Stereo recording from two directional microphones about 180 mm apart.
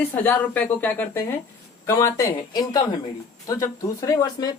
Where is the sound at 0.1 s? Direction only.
10° left (ahead or behind).